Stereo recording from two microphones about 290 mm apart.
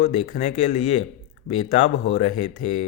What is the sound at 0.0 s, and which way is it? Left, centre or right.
Speech, left.